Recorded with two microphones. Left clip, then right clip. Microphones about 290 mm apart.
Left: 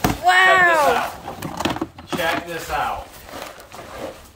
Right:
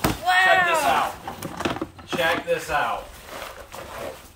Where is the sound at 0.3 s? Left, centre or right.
Centre.